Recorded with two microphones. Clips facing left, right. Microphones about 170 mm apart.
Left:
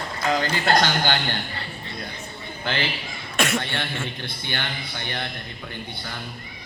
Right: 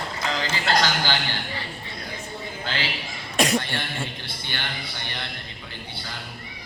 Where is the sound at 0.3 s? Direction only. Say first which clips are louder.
Left 5 dB; 50° left (ahead or behind).